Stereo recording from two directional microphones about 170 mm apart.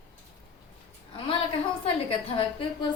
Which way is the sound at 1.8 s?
35° left (ahead or behind).